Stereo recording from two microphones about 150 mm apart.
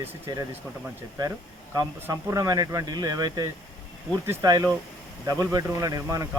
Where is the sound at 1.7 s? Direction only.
20° right (ahead or behind).